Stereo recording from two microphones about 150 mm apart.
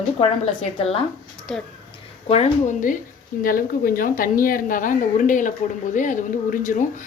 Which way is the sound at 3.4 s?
70° left (ahead or behind).